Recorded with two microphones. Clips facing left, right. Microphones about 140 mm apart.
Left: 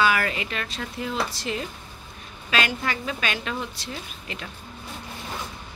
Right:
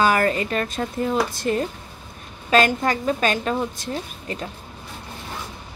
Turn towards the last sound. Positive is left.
turn(degrees=-40)  # may be behind; listen again after turning